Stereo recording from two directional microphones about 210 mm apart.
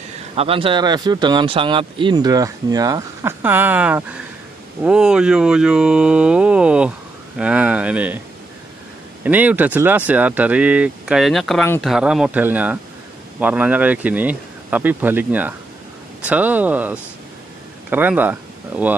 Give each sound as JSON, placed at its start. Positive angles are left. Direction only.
{"t": 0.4, "sound": "speech", "side_deg": -25}
{"t": 9.2, "sound": "speech", "side_deg": -10}